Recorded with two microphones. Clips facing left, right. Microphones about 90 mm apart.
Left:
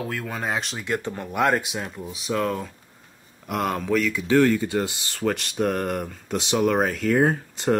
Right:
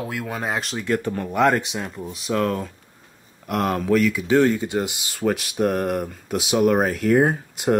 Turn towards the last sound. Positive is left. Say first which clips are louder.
# right 1 dB
turn(degrees=-10)  # may be behind; listen again after turning